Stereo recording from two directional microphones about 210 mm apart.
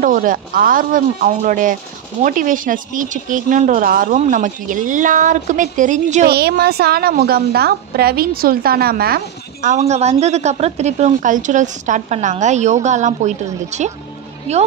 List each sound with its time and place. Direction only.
0.0 s a woman's voice: 40° right (ahead or behind)
6.2 s a woman's voice: 50° right (ahead or behind); by 14.6 s 30° right (ahead or behind)